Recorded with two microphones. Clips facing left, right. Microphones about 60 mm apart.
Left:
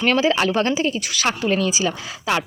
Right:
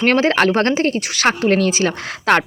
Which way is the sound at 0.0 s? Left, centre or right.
Right.